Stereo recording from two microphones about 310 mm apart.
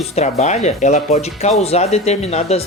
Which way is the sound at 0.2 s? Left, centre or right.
Left.